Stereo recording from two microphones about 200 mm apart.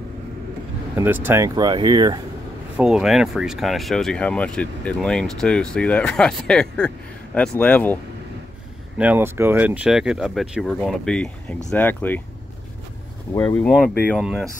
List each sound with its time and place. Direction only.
0.9 s speech: 10° right (ahead or behind)
2.8 s speech: 5° right (ahead or behind)
8.9 s speech: 5° right (ahead or behind); by 12.2 s 10° left (ahead or behind)
13.4 s speech: 5° left (ahead or behind)